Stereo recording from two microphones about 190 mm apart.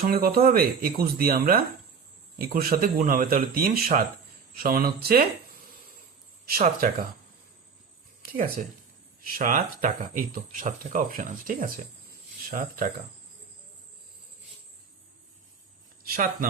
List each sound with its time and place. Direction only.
0.1 s speech: 55° right (ahead or behind)
6.4 s speech: 50° right (ahead or behind)
9.2 s speech: 50° right (ahead or behind)
16.0 s speech: 50° right (ahead or behind)